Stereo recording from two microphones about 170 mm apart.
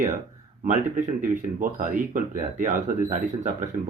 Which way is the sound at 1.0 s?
50° right (ahead or behind).